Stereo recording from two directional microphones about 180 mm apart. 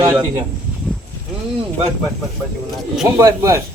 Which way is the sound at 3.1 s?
15° right (ahead or behind).